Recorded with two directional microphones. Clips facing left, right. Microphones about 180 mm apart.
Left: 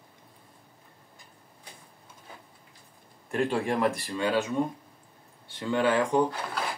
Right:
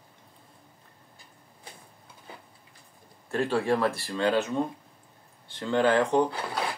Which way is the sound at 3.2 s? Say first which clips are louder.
Right 2 dB; 15° left (ahead or behind).